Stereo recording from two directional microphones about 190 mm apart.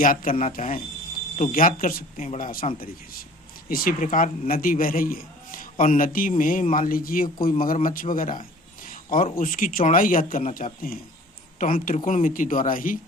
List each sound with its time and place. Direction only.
0.0 s a man's voice: 50° left (ahead or behind)